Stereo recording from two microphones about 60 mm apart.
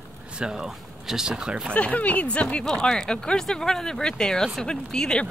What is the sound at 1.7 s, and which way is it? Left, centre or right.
Speech, left.